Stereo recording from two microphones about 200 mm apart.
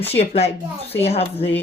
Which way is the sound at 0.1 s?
30° left (ahead or behind).